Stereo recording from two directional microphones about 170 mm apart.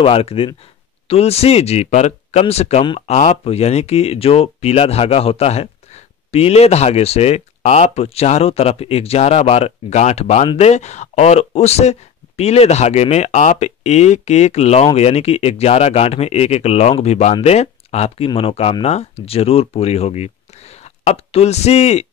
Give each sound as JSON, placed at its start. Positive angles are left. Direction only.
{"t": 0.0, "sound": "speech", "side_deg": 35}